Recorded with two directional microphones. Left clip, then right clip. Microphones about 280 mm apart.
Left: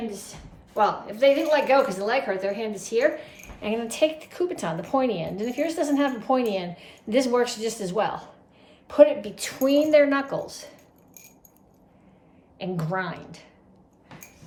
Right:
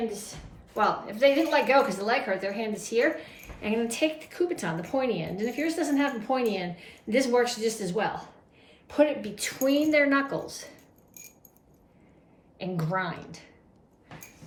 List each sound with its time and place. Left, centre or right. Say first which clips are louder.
0.7 s a woman's voice: left 3 dB; centre
12.5 s speech: left 2 dB; centre